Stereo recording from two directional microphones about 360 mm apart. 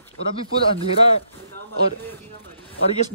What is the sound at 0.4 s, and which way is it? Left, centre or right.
Speech, centre.